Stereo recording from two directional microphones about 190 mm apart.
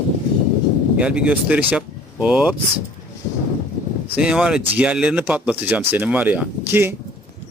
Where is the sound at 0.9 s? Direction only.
5° right (ahead or behind).